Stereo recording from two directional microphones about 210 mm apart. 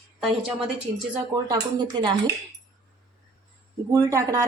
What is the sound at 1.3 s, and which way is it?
Speech, 15° right (ahead or behind).